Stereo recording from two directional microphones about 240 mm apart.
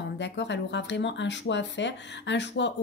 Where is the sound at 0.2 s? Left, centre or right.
Left.